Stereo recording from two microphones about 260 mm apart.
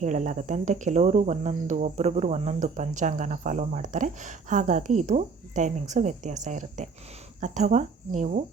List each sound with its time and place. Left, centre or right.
0.0 s speech: right